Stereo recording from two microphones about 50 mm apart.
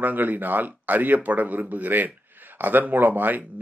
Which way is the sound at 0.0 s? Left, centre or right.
Right.